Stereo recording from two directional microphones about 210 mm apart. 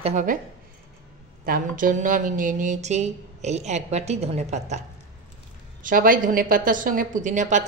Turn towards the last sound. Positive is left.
turn(degrees=-35)  # may be behind; listen again after turning